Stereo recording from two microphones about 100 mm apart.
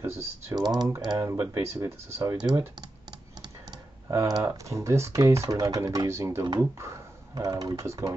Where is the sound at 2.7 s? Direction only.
45° right (ahead or behind).